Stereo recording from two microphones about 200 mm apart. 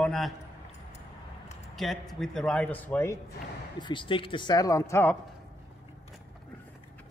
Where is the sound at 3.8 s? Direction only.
25° left (ahead or behind).